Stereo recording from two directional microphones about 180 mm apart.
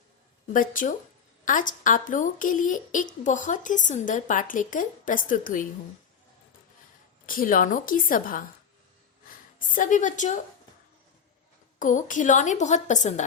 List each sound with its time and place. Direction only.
0.4 s speech: 45° left (ahead or behind)
7.3 s a woman's voice: 50° left (ahead or behind)
11.8 s speech: 45° left (ahead or behind)